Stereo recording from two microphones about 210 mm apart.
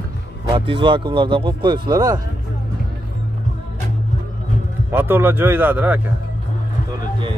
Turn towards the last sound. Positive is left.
turn(degrees=-10)  # may be behind; listen again after turning